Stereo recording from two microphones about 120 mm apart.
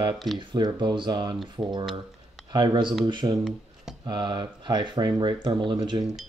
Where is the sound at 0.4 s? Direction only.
40° right (ahead or behind).